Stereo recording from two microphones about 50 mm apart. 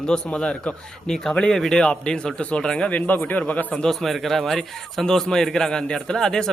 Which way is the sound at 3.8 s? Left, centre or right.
Centre.